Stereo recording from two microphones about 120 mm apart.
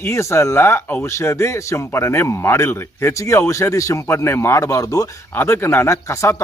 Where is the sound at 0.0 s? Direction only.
25° left (ahead or behind).